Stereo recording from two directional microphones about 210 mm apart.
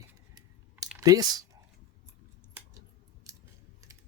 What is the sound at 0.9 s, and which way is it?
Speech, 15° right (ahead or behind).